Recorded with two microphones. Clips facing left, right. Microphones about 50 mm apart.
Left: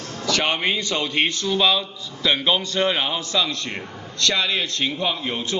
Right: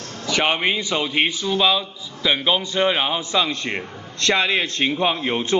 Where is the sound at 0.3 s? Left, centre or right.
Centre.